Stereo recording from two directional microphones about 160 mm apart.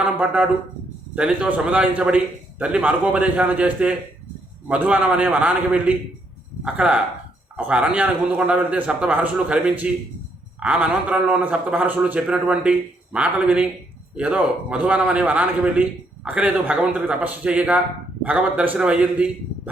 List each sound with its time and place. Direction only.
0.0 s a man's voice: 5° right (ahead or behind)